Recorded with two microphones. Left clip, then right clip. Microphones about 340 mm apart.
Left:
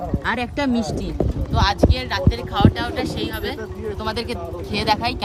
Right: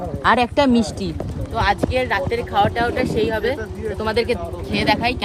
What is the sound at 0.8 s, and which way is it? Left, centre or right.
Speech, left.